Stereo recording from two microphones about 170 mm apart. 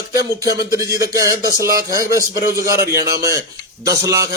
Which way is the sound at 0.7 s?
20° right (ahead or behind).